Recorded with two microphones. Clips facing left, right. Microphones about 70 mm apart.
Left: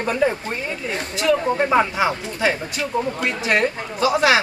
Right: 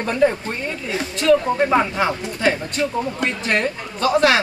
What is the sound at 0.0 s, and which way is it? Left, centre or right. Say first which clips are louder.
A woman's voice: right 2 dB; centre.